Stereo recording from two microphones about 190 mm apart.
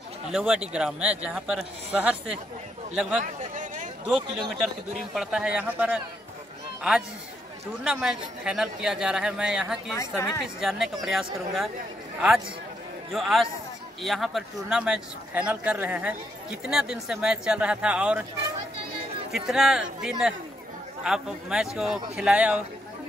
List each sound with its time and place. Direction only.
0.3 s speech: 5° right (ahead or behind)
3.2 s a sound: 40° right (ahead or behind)
4.6 s speech: centre (ahead or behind)
7.8 s speech: 5° right (ahead or behind)
9.9 s a woman's voice: 15° left (ahead or behind)
10.6 s speech: centre (ahead or behind)
13.1 s speech: centre (ahead or behind)
19.3 s speech: centre (ahead or behind)